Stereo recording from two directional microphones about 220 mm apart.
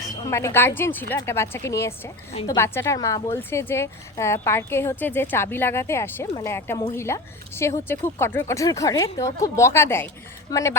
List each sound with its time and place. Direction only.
0.3 s a woman's voice: 15° left (ahead or behind)
2.3 s a woman's voice: 25° left (ahead or behind)
2.6 s a woman's voice: 10° left (ahead or behind)